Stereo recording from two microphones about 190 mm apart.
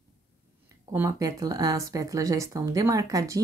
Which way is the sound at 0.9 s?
15° right (ahead or behind).